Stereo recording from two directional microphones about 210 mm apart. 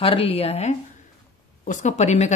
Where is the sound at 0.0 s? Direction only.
25° left (ahead or behind).